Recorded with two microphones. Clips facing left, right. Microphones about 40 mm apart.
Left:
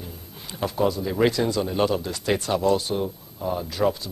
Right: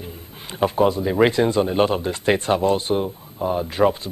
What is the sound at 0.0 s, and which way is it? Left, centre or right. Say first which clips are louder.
A man's voice: right 3 dB; right.